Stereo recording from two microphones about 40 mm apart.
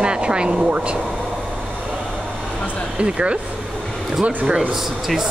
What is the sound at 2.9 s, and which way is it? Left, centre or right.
Speech, right.